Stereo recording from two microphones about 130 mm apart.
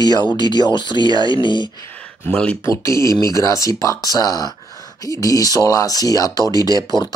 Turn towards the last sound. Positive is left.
turn(degrees=30)  # may be behind; listen again after turning